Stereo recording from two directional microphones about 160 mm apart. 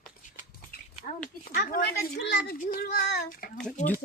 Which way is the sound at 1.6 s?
75° left (ahead or behind).